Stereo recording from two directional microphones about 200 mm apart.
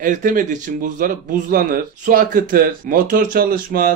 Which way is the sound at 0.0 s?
40° right (ahead or behind).